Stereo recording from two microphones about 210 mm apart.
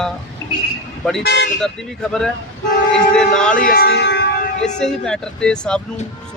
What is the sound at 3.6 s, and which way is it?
Speech, 45° left (ahead or behind).